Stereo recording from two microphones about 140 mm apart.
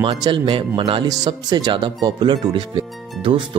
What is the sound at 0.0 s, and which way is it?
Speech, 40° right (ahead or behind).